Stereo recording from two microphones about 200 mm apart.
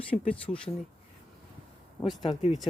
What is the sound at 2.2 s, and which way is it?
Speech, 30° left (ahead or behind).